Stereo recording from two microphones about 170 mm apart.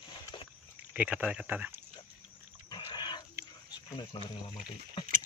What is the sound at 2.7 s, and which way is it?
Pig, 25° left (ahead or behind).